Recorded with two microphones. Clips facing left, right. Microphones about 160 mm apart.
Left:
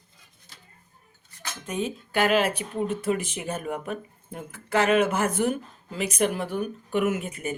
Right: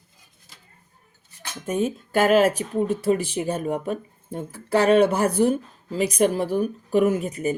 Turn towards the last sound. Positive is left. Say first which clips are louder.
# right 5 dB
turn(degrees=-40)  # may be behind; listen again after turning